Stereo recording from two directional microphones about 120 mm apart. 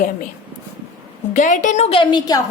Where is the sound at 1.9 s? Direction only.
40° left (ahead or behind).